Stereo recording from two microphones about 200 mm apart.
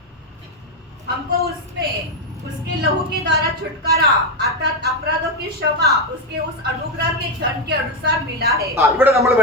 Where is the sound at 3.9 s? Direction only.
50° right (ahead or behind).